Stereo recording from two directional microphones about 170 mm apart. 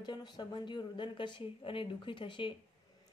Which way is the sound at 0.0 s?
25° left (ahead or behind).